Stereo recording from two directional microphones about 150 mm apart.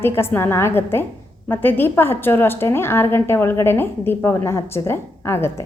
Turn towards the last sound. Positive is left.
turn(degrees=15)  # may be behind; listen again after turning